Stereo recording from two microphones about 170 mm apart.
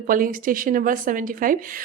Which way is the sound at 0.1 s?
55° right (ahead or behind).